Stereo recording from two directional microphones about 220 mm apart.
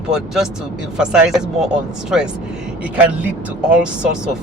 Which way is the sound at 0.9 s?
5° right (ahead or behind).